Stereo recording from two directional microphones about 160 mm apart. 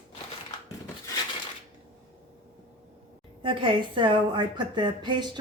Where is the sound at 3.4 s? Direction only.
30° right (ahead or behind).